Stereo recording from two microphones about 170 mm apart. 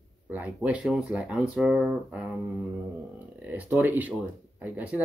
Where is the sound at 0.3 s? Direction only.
10° right (ahead or behind).